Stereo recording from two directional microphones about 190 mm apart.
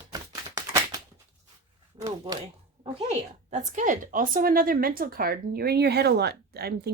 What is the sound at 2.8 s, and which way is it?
A woman's voice, 35° right (ahead or behind).